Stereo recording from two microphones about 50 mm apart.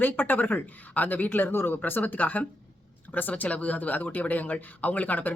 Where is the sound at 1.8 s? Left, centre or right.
Left.